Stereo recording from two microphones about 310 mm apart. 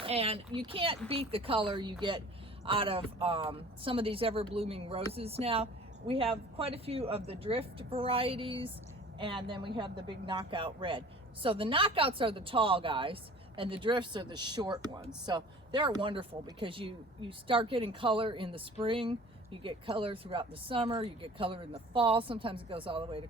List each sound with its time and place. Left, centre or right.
0.0 s speech: centre